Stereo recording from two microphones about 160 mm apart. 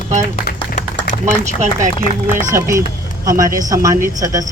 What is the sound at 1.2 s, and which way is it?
Speech, 50° right (ahead or behind).